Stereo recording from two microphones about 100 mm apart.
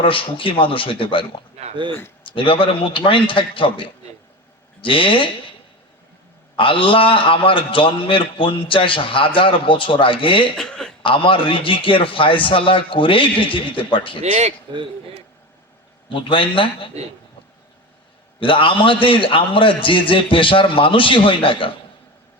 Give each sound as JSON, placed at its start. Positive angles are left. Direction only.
{"t": 0.0, "sound": "a man's voice", "side_deg": 60}
{"t": 1.9, "sound": "speech", "side_deg": 25}
{"t": 2.2, "sound": "a man's voice", "side_deg": 60}
{"t": 6.6, "sound": "a man's voice", "side_deg": 60}
{"t": 10.6, "sound": "a sound", "side_deg": 5}
{"t": 11.0, "sound": "a man's voice", "side_deg": 60}
{"t": 14.7, "sound": "a man's voice", "side_deg": -55}
{"t": 16.0, "sound": "a man's voice", "side_deg": 55}
{"t": 18.3, "sound": "a man's voice", "side_deg": 60}